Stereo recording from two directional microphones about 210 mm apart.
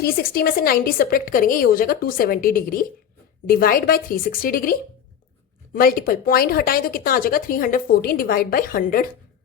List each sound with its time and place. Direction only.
0.0 s speech: 45° left (ahead or behind)